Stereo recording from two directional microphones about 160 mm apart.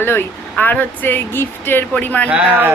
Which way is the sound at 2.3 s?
10° right (ahead or behind).